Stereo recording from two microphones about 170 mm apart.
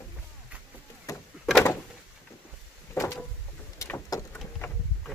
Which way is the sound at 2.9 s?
15° left (ahead or behind).